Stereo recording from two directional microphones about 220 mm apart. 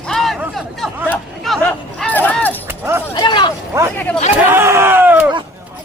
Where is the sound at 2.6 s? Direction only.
10° right (ahead or behind).